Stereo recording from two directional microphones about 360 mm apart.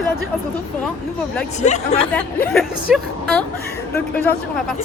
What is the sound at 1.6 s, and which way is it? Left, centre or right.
Speech, centre.